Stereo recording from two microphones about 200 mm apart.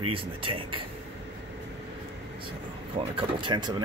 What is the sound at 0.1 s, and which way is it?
Speech, 25° right (ahead or behind).